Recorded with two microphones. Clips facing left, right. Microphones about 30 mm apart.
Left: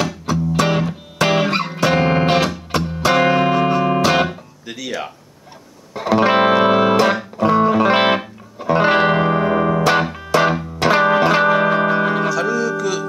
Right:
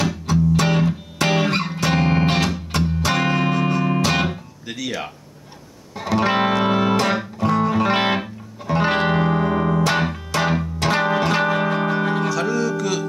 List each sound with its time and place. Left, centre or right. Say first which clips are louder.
0.0 s music: even; centre
5.9 s music: left 5 dB; centre